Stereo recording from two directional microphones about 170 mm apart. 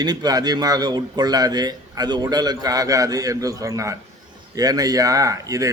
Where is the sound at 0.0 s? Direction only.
25° right (ahead or behind).